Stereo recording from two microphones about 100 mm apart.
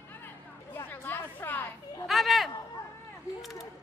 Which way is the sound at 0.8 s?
20° left (ahead or behind).